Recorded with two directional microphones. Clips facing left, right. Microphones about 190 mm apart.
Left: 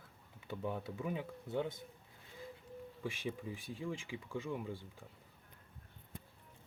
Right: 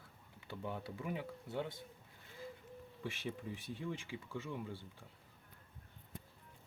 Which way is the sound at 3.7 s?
10° left (ahead or behind).